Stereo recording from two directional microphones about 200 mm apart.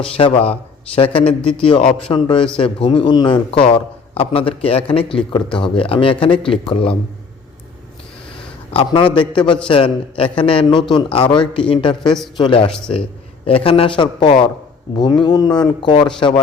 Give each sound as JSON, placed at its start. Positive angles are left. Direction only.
{"t": 0.2, "sound": "a man's voice", "side_deg": 25}
{"t": 1.4, "sound": "speech", "side_deg": 5}
{"t": 2.0, "sound": "a man's voice", "side_deg": 25}
{"t": 8.7, "sound": "a man's voice", "side_deg": 25}
{"t": 12.0, "sound": "speech", "side_deg": 0}
{"t": 12.4, "sound": "a man's voice", "side_deg": 25}